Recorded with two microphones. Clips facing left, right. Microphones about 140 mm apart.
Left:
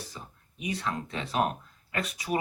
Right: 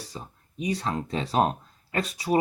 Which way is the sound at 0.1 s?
30° right (ahead or behind).